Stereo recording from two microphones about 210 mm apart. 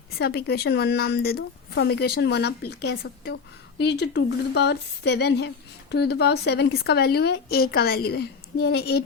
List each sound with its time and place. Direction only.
0.2 s speech: 50° left (ahead or behind)